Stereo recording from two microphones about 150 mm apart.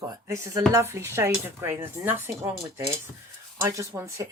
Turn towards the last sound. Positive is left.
turn(degrees=-20)  # may be behind; listen again after turning